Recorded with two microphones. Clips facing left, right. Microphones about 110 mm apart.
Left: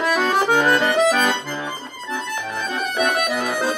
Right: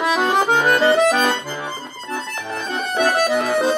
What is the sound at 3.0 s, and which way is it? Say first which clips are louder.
Accordion: right 4 dB; 30° right (ahead or behind).